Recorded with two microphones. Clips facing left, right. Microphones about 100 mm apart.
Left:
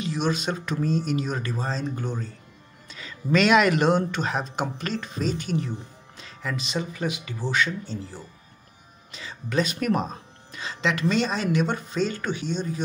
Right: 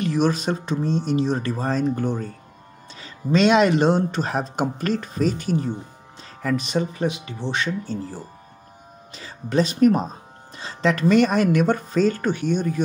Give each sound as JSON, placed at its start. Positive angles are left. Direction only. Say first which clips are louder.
{"t": 0.0, "sound": "speech", "louder": "right 5 dB", "side_deg": -50}
{"t": 2.9, "sound": "speech", "louder": "right 2 dB", "side_deg": -35}
{"t": 7.8, "sound": "speech", "louder": "right 5 dB", "side_deg": -45}